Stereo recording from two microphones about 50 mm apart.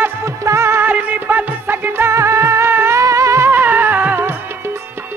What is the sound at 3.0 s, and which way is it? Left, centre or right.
Music, right.